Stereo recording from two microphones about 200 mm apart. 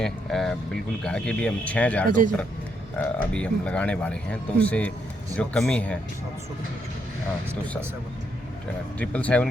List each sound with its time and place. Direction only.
0.0 s speech: centre (ahead or behind)
2.0 s speech: 40° right (ahead or behind)
3.0 s speech: 10° left (ahead or behind)
9.0 s speech: 5° left (ahead or behind)